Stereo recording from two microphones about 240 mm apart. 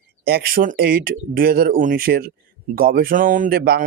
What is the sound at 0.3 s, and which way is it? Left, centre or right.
Speech, right.